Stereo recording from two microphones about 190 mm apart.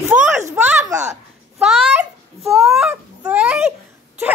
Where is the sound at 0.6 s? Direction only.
10° right (ahead or behind).